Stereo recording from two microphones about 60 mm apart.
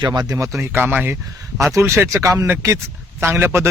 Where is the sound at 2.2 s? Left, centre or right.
Right.